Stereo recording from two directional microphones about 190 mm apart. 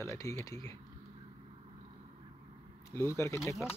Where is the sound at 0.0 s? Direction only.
15° left (ahead or behind).